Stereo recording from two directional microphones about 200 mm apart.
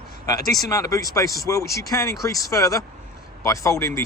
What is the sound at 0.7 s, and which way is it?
Speech, 15° left (ahead or behind).